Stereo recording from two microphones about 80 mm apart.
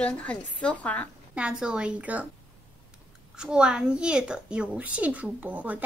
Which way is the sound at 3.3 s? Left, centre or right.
Centre.